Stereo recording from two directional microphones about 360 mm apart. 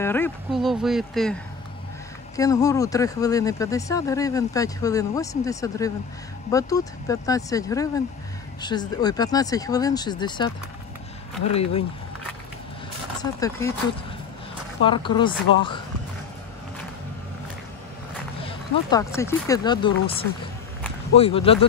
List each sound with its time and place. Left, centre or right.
0.0 s speech: centre
13.2 s speech: centre
14.8 s speech: centre
18.4 s speech: centre
21.2 s speech: centre